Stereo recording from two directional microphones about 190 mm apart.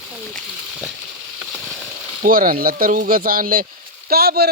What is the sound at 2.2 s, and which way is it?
Speech, 50° right (ahead or behind).